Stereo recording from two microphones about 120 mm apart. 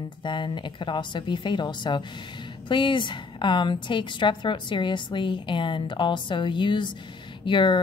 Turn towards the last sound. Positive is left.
turn(degrees=40)  # may be behind; listen again after turning